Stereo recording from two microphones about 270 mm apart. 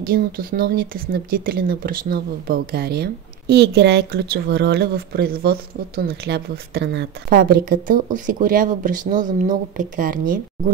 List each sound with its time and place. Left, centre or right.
0.1 s speech: right